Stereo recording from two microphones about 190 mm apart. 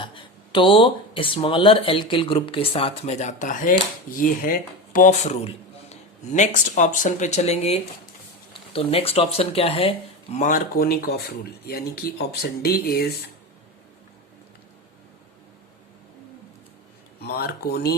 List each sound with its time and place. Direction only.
0.0 s speech: 25° left (ahead or behind); by 13.1 s 55° left (ahead or behind)
17.2 s speech: 55° left (ahead or behind)